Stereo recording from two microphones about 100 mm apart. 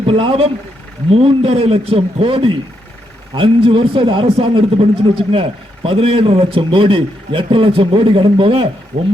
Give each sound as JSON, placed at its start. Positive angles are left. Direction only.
{"t": 0.0, "sound": "a man's voice", "side_deg": -65}